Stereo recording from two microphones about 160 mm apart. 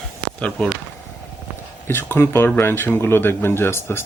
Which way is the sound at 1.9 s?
15° left (ahead or behind).